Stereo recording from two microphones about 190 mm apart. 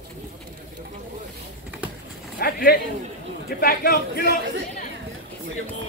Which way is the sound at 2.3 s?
55° left (ahead or behind).